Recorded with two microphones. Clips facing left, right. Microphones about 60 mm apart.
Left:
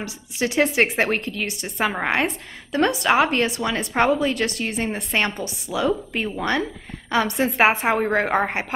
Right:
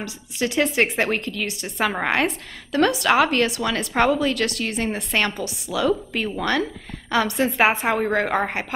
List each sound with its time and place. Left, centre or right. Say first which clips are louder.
0.0 s a woman's voice: even; left